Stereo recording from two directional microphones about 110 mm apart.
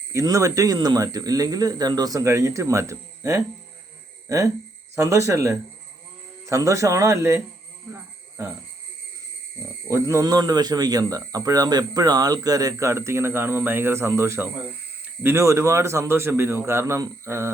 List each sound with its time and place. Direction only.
0.1 s a man's voice: 30° right (ahead or behind)
7.9 s a sound: 20° right (ahead or behind)
9.9 s a man's voice: 25° right (ahead or behind)